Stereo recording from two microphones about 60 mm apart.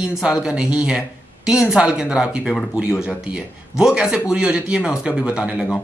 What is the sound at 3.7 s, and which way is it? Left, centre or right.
A man's voice, centre.